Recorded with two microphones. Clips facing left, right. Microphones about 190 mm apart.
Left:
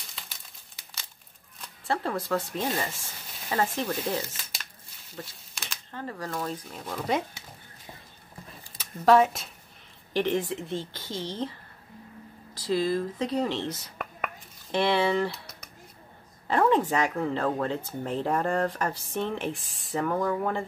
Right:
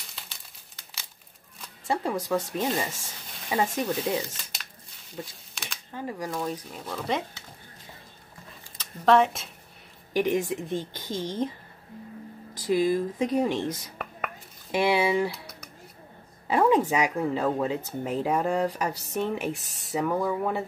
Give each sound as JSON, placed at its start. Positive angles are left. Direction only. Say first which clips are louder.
{"t": 1.9, "sound": "speech", "louder": "right 1 dB", "side_deg": -10}
{"t": 5.5, "sound": "a sound", "louder": "right 1 dB", "side_deg": 0}
{"t": 5.9, "sound": "speech", "louder": "right 2 dB", "side_deg": -15}
{"t": 8.7, "sound": "speech", "louder": "left 1 dB", "side_deg": 5}
{"t": 10.1, "sound": "speech", "louder": "right 2 dB", "side_deg": -10}
{"t": 12.5, "sound": "speech", "louder": "right 3 dB", "side_deg": -15}
{"t": 14.7, "sound": "speech", "louder": "right 1 dB", "side_deg": -10}
{"t": 16.4, "sound": "a woman's voice", "louder": "right 1 dB", "side_deg": -10}
{"t": 19.5, "sound": "speech", "louder": "right 3 dB", "side_deg": -40}
{"t": 19.9, "sound": "speech", "louder": "right 1 dB", "side_deg": -10}